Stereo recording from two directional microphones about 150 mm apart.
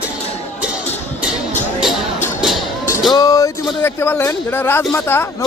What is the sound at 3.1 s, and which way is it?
Music, 25° left (ahead or behind).